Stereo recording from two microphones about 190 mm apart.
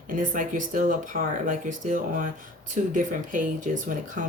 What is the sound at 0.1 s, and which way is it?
Speech, 45° right (ahead or behind).